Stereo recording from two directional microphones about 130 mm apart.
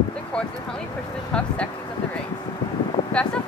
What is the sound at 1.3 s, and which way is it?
Speech, 10° left (ahead or behind).